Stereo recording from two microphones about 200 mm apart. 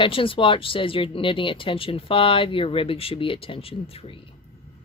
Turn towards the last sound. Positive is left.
turn(degrees=25)  # may be behind; listen again after turning